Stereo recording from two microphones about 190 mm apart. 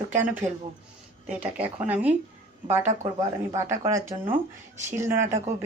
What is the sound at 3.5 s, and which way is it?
Speech, 15° right (ahead or behind).